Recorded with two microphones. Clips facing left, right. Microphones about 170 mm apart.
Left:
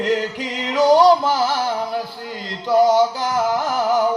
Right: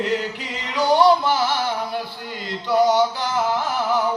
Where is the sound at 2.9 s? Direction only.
45° left (ahead or behind).